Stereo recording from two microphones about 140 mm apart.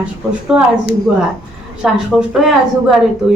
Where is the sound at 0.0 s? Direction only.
5° right (ahead or behind).